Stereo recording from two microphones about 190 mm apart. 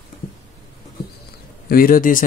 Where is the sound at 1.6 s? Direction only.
50° left (ahead or behind).